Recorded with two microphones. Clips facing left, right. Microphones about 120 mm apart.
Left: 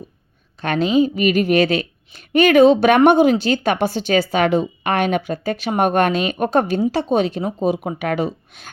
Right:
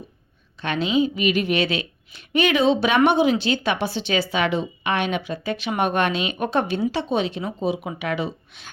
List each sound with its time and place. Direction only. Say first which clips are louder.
0.6 s a woman's voice: left 5 dB; 45° left (ahead or behind)